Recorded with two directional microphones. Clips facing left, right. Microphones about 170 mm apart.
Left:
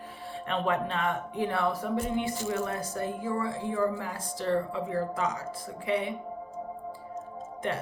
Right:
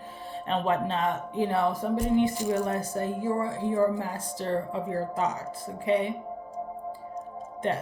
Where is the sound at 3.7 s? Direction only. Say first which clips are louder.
Right 5 dB; 35° right (ahead or behind).